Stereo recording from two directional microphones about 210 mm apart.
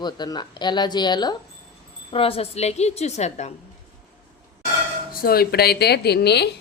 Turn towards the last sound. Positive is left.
turn(degrees=50)  # may be behind; listen again after turning